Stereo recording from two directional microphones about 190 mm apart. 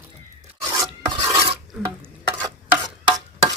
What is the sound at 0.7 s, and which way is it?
Filing, 15° right (ahead or behind).